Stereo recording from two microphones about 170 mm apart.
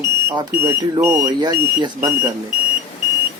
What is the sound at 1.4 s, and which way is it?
Speech, 25° right (ahead or behind).